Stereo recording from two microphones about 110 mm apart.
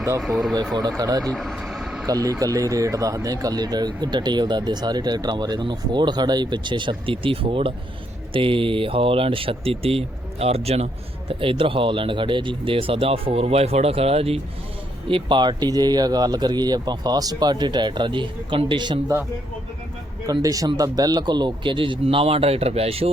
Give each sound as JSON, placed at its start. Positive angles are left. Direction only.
{"t": 0.2, "sound": "speech", "side_deg": 0}
{"t": 0.8, "sound": "speech", "side_deg": -35}
{"t": 1.2, "sound": "speech", "side_deg": 5}
{"t": 2.0, "sound": "speech", "side_deg": -30}
{"t": 11.3, "sound": "speech", "side_deg": -55}
{"t": 15.1, "sound": "speech", "side_deg": -45}
{"t": 20.2, "sound": "speech", "side_deg": -35}
{"t": 22.0, "sound": "speech", "side_deg": -60}